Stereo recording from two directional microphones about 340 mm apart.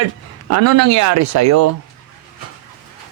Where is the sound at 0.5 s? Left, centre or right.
Right.